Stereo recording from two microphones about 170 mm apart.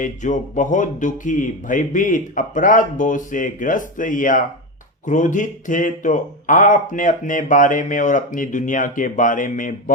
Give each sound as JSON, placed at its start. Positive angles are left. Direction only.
{"t": 0.0, "sound": "speech", "side_deg": 45}